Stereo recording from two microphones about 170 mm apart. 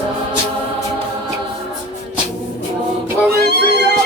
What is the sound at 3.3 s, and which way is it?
Music, 85° right.